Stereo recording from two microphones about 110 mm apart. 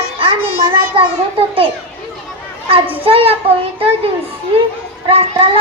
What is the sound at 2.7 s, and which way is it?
Speech, 55° right (ahead or behind).